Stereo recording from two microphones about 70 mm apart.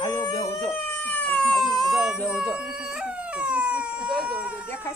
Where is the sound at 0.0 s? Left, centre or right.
Left.